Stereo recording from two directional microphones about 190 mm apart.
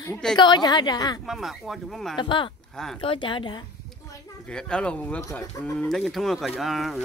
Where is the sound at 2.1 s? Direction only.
25° left (ahead or behind).